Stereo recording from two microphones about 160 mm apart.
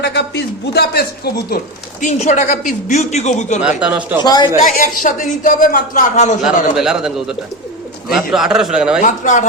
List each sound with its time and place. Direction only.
0.0 s a man's voice: 90° left
2.0 s speech: 50° left (ahead or behind)
3.6 s speech: 5° right (ahead or behind)
4.2 s a man's voice: 25° left (ahead or behind)
4.5 s speech: 55° left (ahead or behind)
6.4 s speech: 5° right (ahead or behind)
9.0 s speech: 50° left (ahead or behind)